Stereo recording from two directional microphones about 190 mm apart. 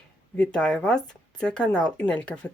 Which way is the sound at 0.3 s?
5° left (ahead or behind).